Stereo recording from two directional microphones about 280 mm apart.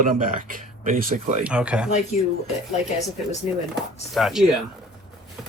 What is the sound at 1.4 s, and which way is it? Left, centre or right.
Speech, centre.